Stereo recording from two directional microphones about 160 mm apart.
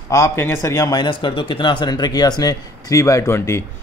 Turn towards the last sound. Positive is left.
turn(degrees=15)  # may be behind; listen again after turning